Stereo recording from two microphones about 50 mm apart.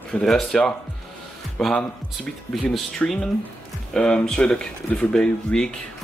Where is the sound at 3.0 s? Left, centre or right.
Left.